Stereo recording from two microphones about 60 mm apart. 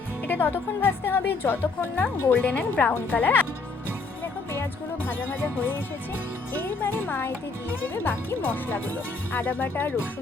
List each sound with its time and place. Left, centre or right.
0.3 s speech: left
2.3 s speech: left
4.5 s speech: left